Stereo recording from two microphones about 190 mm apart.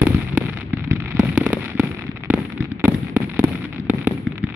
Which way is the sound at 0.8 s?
10° right (ahead or behind).